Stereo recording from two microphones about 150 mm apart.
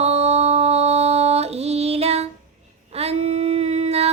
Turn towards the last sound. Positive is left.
turn(degrees=-45)  # may be behind; listen again after turning